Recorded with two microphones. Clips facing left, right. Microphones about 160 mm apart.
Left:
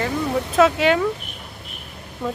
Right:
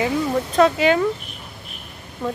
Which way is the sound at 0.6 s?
Centre (ahead or behind).